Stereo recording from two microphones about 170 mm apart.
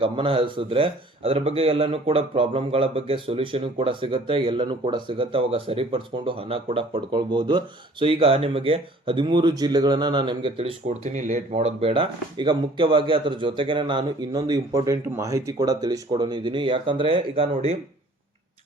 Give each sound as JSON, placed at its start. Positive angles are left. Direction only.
{"t": 0.0, "sound": "speech", "side_deg": -30}
{"t": 11.1, "sound": "speech", "side_deg": -45}